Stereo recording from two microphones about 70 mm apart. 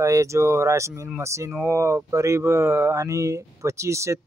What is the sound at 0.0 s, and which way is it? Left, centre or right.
Speech, right.